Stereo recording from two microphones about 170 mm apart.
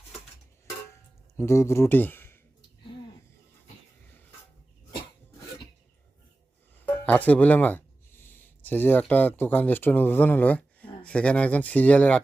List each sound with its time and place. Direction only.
1.4 s speech: 15° left (ahead or behind)
6.8 s speech: 10° left (ahead or behind)